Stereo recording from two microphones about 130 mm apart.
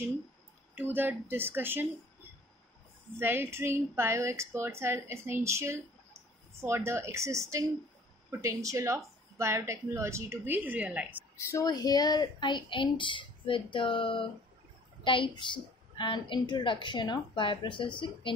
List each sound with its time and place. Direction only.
0.7 s speech: 15° right (ahead or behind)
3.2 s a woman's voice: 15° right (ahead or behind)
11.3 s a woman's voice: 20° left (ahead or behind); by 18.3 s 40° left (ahead or behind)